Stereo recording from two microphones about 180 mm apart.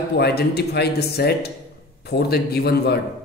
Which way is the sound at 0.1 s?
65° left (ahead or behind).